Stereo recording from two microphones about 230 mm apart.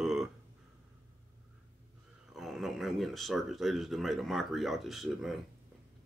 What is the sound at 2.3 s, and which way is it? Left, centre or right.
Speech, centre.